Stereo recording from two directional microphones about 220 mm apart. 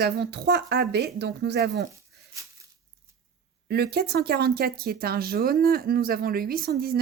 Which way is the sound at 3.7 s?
45° right (ahead or behind).